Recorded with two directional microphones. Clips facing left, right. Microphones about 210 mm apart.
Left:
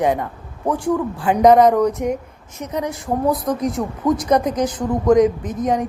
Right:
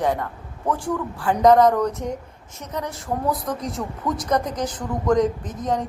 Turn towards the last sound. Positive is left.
turn(degrees=15)  # may be behind; listen again after turning